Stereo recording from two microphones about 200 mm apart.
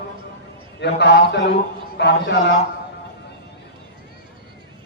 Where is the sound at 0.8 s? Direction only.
60° left (ahead or behind).